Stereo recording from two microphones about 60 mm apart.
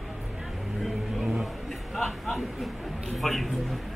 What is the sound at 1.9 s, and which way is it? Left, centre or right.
A man's voice, centre.